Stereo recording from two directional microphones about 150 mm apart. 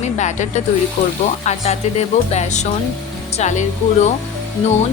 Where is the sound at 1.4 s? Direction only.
50° left (ahead or behind).